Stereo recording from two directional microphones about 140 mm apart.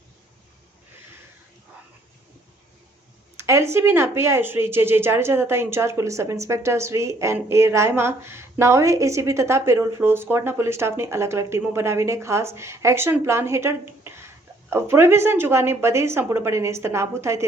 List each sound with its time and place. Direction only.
3.3 s speech: 20° right (ahead or behind)